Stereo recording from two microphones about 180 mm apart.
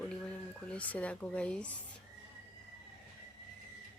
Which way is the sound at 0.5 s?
5° left (ahead or behind).